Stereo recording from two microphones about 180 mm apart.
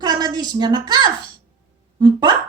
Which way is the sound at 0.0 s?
20° right (ahead or behind).